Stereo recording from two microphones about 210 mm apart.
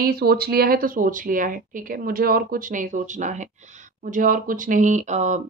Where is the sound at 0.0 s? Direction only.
45° right (ahead or behind).